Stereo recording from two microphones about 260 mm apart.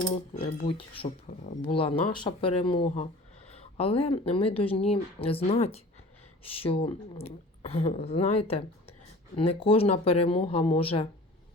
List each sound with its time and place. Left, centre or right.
0.3 s speech: left